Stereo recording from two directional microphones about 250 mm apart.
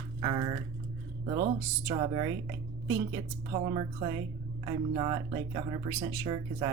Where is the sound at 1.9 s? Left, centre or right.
Centre.